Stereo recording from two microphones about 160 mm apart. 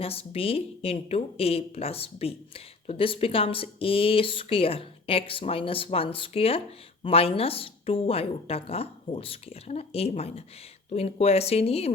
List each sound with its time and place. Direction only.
0.0 s a woman's voice: 35° left (ahead or behind)